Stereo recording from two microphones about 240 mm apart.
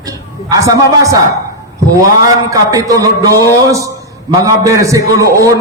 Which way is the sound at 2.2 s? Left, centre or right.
Centre.